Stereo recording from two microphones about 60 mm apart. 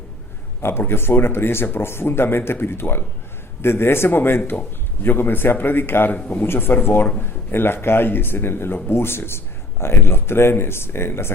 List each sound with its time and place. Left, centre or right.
0.6 s speech: left
6.1 s speech: left
6.4 s speech: left